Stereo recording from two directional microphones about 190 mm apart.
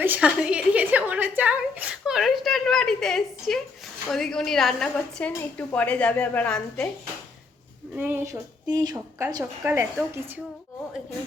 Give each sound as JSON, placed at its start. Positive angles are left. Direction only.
{"t": 0.0, "sound": "a sound", "side_deg": -10}
{"t": 4.1, "sound": "a woman's voice", "side_deg": 0}
{"t": 7.9, "sound": "speech", "side_deg": -10}